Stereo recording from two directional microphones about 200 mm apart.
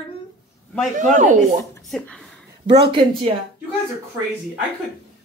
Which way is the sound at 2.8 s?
25° right (ahead or behind).